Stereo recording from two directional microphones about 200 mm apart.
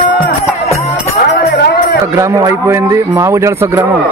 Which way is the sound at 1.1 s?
50° left (ahead or behind).